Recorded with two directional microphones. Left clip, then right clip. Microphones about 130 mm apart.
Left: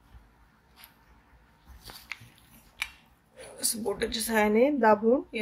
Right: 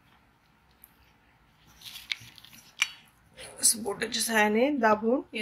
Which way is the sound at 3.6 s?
15° left (ahead or behind).